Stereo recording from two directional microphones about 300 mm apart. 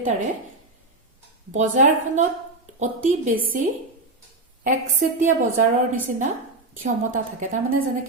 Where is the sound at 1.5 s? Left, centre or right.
Right.